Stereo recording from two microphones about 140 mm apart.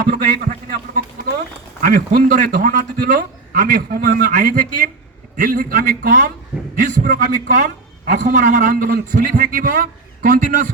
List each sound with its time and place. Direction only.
0.0 s a sound: 80° right
1.8 s a man's voice: 90° right; by 4.9 s 65° right (ahead or behind)
5.4 s a man's voice: 90° right; by 10.7 s 70° right (ahead or behind)